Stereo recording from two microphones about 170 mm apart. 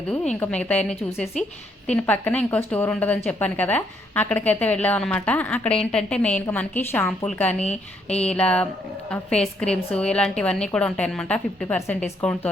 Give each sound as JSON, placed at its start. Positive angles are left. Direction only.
{"t": 0.3, "sound": "a woman's voice", "side_deg": 10}
{"t": 7.6, "sound": "a woman's voice", "side_deg": 40}
{"t": 8.3, "sound": "a woman's voice", "side_deg": 5}